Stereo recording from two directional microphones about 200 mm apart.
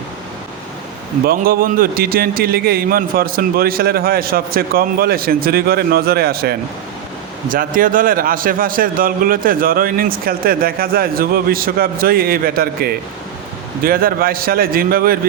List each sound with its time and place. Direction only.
1.3 s a man's voice: 45° right (ahead or behind)